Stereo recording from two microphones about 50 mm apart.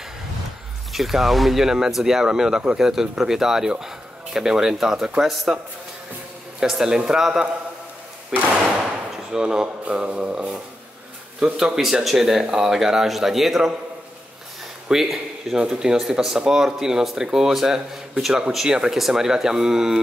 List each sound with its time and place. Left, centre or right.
0.9 s speech: centre
6.6 s speech: centre
14.9 s speech: centre